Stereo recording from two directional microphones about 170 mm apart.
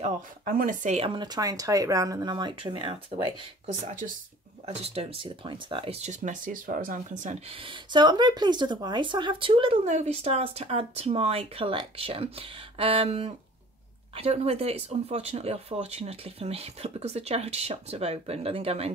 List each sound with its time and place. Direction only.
0.0 s speech: 55° right (ahead or behind)
7.4 s speech: 30° right (ahead or behind)